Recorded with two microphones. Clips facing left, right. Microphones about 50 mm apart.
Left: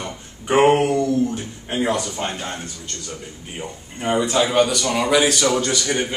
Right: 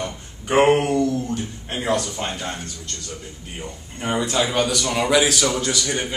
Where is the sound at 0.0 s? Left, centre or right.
Centre.